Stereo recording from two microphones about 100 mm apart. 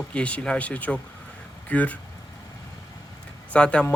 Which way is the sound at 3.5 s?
10° left (ahead or behind).